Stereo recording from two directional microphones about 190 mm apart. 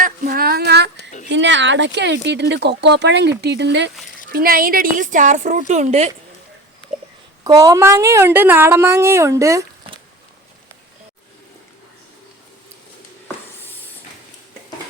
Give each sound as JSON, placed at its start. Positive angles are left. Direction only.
{"t": 0.0, "sound": "a sound", "side_deg": -50}
{"t": 1.3, "sound": "speech", "side_deg": -70}
{"t": 4.3, "sound": "a woman's voice", "side_deg": -50}
{"t": 7.4, "sound": "a woman's voice", "side_deg": -15}